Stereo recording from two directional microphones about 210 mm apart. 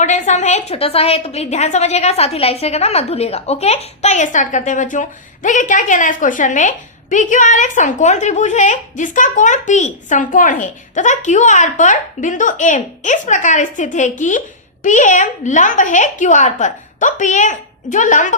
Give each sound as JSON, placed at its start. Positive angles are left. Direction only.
{"t": 0.0, "sound": "a woman's voice", "side_deg": 35}